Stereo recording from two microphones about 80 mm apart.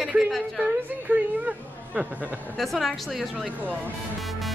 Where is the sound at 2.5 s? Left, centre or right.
Centre.